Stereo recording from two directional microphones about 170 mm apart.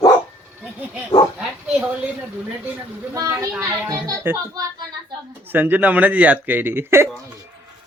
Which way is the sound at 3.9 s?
20° right (ahead or behind).